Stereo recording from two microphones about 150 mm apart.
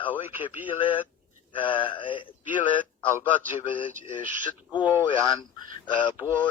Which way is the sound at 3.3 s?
10° left (ahead or behind).